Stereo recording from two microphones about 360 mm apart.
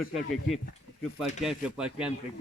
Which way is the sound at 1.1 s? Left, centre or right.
Centre.